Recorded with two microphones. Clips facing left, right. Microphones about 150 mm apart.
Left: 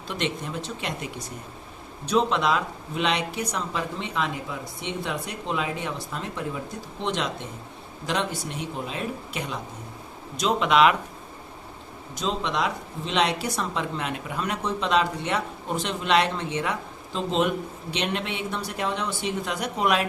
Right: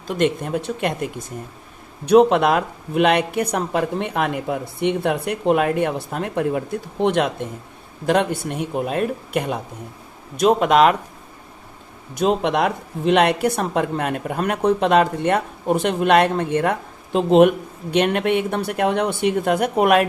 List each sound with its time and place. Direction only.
0.1 s speech: 50° right (ahead or behind)
12.1 s speech: 60° right (ahead or behind)